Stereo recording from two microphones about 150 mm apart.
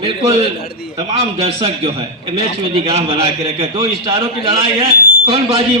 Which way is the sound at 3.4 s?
25° right (ahead or behind).